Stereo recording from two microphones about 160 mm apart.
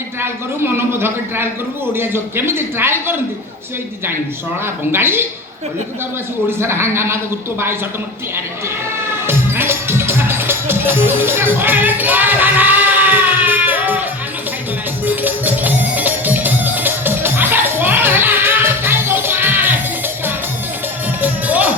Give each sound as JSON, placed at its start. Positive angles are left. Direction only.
{"t": 0.2, "sound": "a man's voice", "side_deg": -15}
{"t": 4.6, "sound": "a man's voice", "side_deg": -15}
{"t": 6.6, "sound": "a man's voice", "side_deg": -15}
{"t": 9.2, "sound": "music", "side_deg": -15}
{"t": 15.0, "sound": "music", "side_deg": -10}
{"t": 21.2, "sound": "music", "side_deg": -10}